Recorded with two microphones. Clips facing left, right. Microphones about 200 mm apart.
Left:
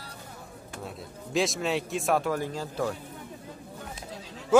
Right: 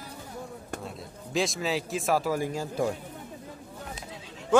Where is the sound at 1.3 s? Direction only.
Centre (ahead or behind).